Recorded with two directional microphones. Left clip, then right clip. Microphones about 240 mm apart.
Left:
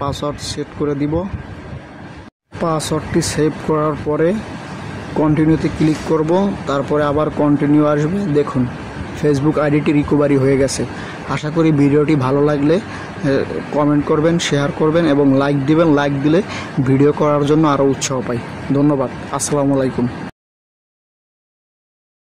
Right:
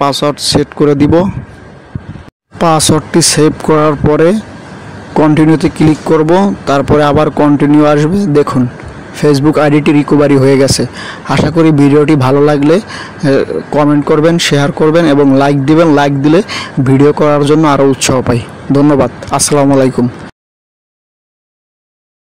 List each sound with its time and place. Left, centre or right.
0.0 s speech: right
2.6 s speech: right